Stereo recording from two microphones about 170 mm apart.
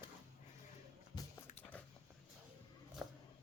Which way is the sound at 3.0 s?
5° right (ahead or behind).